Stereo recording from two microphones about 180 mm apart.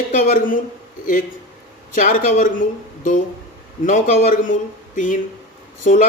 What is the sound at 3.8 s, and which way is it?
Speech, 45° left (ahead or behind).